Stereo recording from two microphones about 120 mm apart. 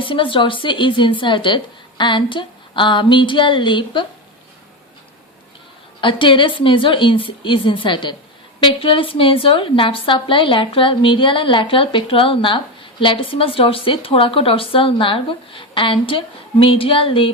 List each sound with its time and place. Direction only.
0.0 s a woman's voice: 45° left (ahead or behind)
6.0 s a woman's voice: 45° left (ahead or behind)